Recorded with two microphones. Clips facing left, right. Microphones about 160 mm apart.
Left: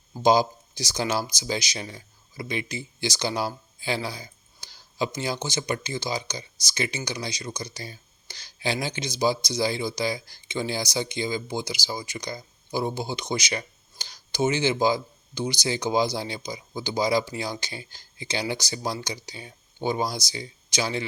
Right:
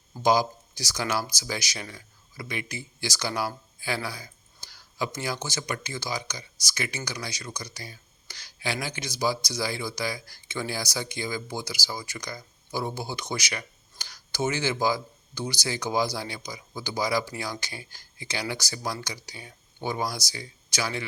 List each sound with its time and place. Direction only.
0.2 s speech: 25° left (ahead or behind)